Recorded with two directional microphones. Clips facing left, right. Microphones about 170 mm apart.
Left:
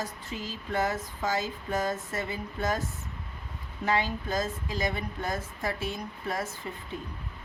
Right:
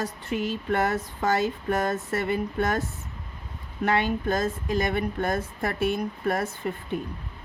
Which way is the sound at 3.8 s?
60° right (ahead or behind).